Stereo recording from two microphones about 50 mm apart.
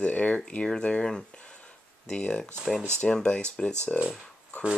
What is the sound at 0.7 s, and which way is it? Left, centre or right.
Speech, centre.